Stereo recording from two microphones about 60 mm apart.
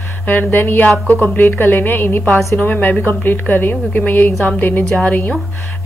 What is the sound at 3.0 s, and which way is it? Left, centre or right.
A woman's voice, left.